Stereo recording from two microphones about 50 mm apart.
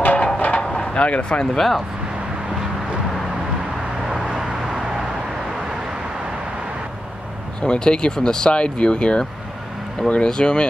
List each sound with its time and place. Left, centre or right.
0.0 s music: left
0.4 s a sound: left
1.4 s speech: centre
4.1 s vehicle: centre
7.6 s speech: centre